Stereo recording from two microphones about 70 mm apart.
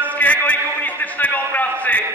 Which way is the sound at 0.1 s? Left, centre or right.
Left.